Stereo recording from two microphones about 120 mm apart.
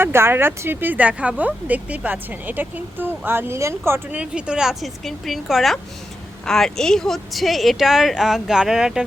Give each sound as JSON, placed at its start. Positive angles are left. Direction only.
{"t": 0.0, "sound": "speech", "side_deg": -20}
{"t": 4.2, "sound": "a woman's voice", "side_deg": -10}